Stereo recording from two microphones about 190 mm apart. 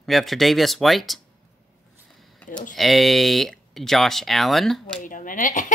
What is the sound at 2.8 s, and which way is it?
Speech, centre (ahead or behind).